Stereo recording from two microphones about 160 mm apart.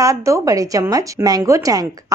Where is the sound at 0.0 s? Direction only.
20° right (ahead or behind).